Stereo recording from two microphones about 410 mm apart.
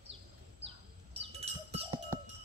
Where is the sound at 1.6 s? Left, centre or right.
Centre.